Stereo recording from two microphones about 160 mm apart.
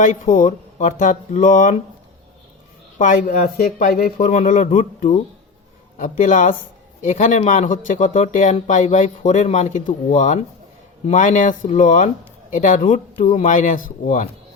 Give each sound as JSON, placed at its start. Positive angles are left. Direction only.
{"t": 0.0, "sound": "speech", "side_deg": 55}
{"t": 3.0, "sound": "speech", "side_deg": 60}